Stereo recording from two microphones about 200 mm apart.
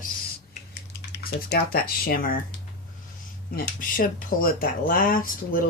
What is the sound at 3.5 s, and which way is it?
Speech, 45° left (ahead or behind).